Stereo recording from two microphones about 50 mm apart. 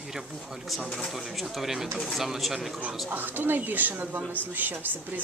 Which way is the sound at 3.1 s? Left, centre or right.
Right.